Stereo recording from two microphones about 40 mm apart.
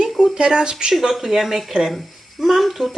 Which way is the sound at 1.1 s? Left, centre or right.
Centre.